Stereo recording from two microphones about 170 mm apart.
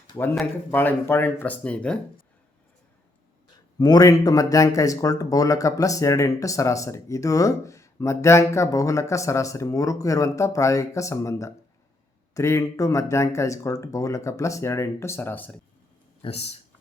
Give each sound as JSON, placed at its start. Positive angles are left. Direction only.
{"t": 0.3, "sound": "speech", "side_deg": 10}
{"t": 3.8, "sound": "speech", "side_deg": 25}
{"t": 16.2, "sound": "speech", "side_deg": 35}